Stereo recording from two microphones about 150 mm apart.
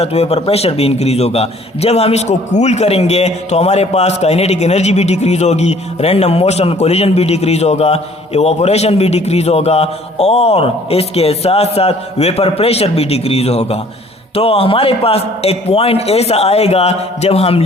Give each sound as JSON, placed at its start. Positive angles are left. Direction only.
{"t": 0.0, "sound": "a man's voice", "side_deg": 45}